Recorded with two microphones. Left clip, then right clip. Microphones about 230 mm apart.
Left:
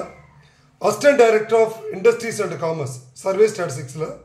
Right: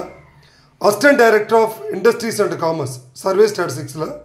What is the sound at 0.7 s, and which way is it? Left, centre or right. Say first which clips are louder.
A man's voice: right 2 dB; right.